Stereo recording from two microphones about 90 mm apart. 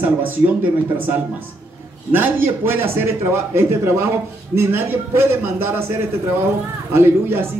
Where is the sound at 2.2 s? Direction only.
20° right (ahead or behind).